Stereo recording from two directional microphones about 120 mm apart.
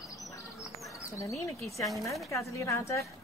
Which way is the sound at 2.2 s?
25° left (ahead or behind).